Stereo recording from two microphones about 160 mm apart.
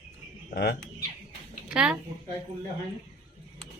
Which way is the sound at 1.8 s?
5° right (ahead or behind).